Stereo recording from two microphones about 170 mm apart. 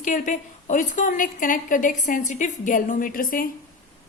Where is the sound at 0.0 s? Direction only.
50° left (ahead or behind).